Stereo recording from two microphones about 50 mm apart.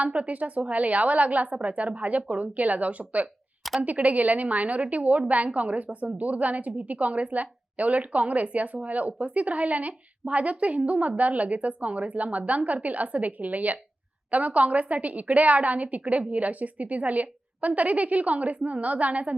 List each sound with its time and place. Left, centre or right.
0.0 s a woman's voice: right